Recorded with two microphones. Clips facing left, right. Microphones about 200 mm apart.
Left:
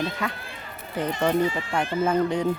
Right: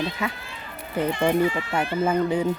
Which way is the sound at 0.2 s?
5° right (ahead or behind).